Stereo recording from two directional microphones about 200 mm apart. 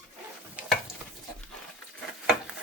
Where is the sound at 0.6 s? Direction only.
5° right (ahead or behind).